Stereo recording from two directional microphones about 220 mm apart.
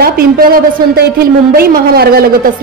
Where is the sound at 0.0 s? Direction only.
45° right (ahead or behind).